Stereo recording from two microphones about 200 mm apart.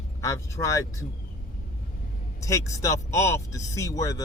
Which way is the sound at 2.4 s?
15° left (ahead or behind).